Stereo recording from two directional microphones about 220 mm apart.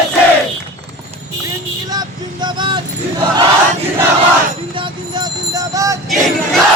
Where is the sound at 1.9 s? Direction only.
20° right (ahead or behind).